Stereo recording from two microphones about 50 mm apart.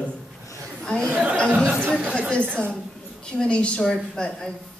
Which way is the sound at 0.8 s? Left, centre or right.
Centre.